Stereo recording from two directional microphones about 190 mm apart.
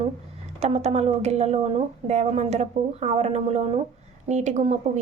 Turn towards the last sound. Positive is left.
turn(degrees=-35)  # may be behind; listen again after turning